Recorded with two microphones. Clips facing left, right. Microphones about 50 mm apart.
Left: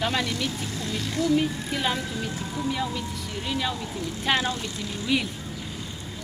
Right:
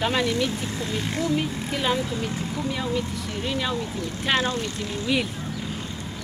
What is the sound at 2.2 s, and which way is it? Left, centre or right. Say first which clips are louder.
Speech: right 2 dB; right.